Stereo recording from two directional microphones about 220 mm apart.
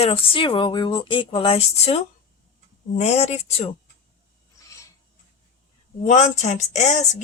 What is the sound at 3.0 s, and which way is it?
Speech, 30° left (ahead or behind).